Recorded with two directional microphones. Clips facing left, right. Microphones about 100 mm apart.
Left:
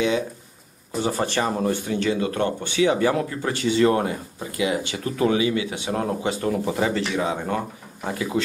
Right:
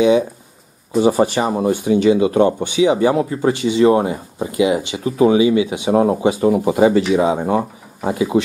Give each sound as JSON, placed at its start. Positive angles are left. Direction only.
{"t": 1.0, "sound": "speech", "side_deg": -15}